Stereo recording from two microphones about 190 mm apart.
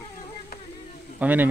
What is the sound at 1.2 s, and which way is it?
Speech, 10° right (ahead or behind).